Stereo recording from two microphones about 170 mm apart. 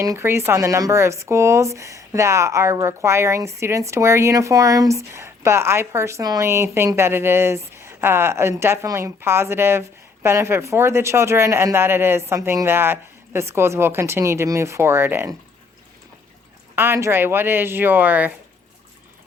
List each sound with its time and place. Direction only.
0.0 s speech: 15° right (ahead or behind)
16.7 s speech: 15° right (ahead or behind)